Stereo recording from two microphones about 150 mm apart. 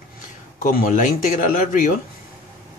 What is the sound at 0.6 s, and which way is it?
Speech, 65° left (ahead or behind).